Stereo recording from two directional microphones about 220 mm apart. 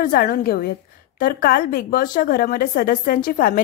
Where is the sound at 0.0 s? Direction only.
40° left (ahead or behind).